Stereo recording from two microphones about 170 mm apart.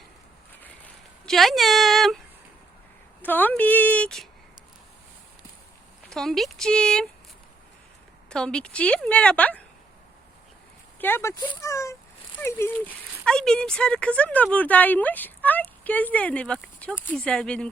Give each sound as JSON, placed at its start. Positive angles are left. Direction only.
{"t": 1.2, "sound": "a woman's voice", "side_deg": 0}
{"t": 6.1, "sound": "speech", "side_deg": 0}
{"t": 8.3, "sound": "speech", "side_deg": 5}
{"t": 11.0, "sound": "speech", "side_deg": 15}